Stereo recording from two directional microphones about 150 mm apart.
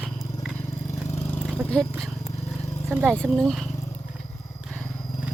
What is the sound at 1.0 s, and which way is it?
Vehicle, 15° left (ahead or behind).